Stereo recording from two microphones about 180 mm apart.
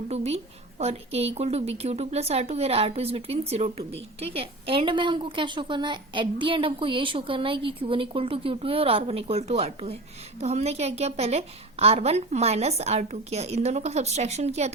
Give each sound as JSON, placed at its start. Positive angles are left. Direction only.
{"t": 0.1, "sound": "a woman's voice", "side_deg": -35}